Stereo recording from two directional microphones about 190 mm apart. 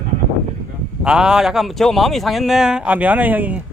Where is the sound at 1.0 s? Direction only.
5° right (ahead or behind).